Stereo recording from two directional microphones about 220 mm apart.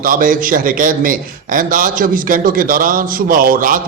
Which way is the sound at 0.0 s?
40° right (ahead or behind).